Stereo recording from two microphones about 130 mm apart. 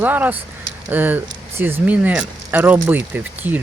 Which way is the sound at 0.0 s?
15° right (ahead or behind).